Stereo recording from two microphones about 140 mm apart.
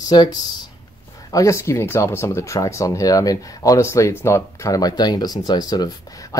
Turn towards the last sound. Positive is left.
turn(degrees=30)  # may be behind; listen again after turning